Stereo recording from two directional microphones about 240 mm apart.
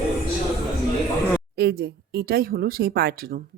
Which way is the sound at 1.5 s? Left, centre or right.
Right.